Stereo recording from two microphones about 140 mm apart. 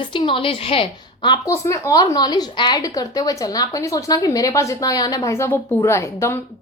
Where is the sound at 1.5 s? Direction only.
20° left (ahead or behind).